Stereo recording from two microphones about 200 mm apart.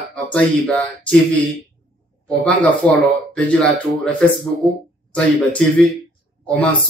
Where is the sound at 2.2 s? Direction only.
5° left (ahead or behind).